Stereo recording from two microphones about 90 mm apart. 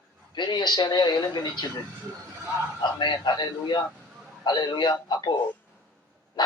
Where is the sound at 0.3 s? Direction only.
55° left (ahead or behind).